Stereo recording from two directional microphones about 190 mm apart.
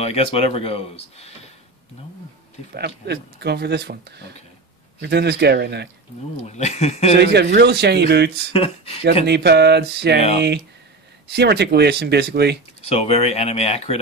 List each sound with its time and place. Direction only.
0.0 s speech: 30° left (ahead or behind)
3.1 s speech: 60° right (ahead or behind)
6.4 s speech: 35° left (ahead or behind)
7.2 s speech: 60° right (ahead or behind)
8.5 s speech: 30° left (ahead or behind)
9.2 s speech: 60° right (ahead or behind)
12.8 s speech: 30° left (ahead or behind)